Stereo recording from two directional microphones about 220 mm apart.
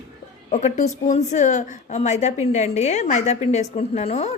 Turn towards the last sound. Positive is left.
turn(degrees=30)  # may be behind; listen again after turning